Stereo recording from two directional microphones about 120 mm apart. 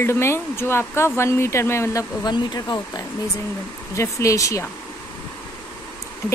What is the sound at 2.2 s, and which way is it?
Speech, 35° left (ahead or behind).